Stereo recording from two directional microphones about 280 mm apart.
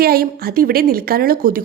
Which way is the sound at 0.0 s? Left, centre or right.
Right.